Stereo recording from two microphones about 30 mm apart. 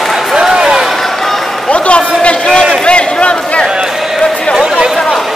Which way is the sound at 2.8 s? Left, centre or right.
Left.